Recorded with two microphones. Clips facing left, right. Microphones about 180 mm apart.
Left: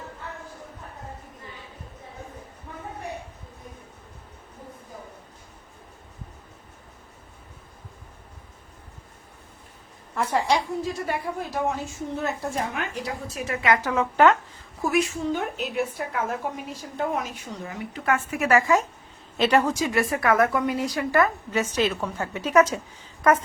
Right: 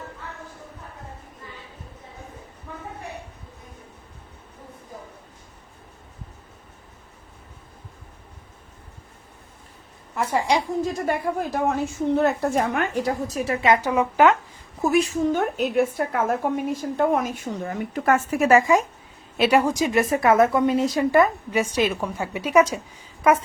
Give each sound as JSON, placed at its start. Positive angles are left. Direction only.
{"t": 10.2, "sound": "a woman's voice", "side_deg": -10}
{"t": 11.0, "sound": "a woman's voice", "side_deg": -50}
{"t": 13.4, "sound": "a woman's voice", "side_deg": -30}
{"t": 14.8, "sound": "a woman's voice", "side_deg": -30}
{"t": 15.3, "sound": "a woman's voice", "side_deg": -45}
{"t": 18.3, "sound": "a woman's voice", "side_deg": -25}